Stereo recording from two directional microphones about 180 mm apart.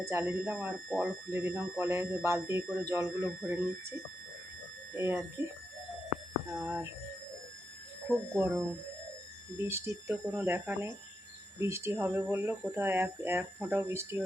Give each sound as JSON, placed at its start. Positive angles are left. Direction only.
{"t": 0.0, "sound": "speech", "side_deg": -15}
{"t": 4.9, "sound": "speech", "side_deg": -15}
{"t": 6.5, "sound": "speech", "side_deg": -10}
{"t": 8.4, "sound": "speech", "side_deg": -15}